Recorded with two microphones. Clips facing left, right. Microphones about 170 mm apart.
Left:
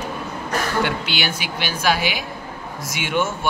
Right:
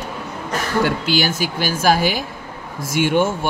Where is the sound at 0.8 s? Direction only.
45° right (ahead or behind).